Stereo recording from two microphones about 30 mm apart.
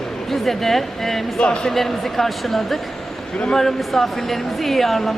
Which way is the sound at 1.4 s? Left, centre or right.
Left.